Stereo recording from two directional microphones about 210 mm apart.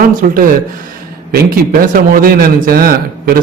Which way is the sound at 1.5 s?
45° right (ahead or behind).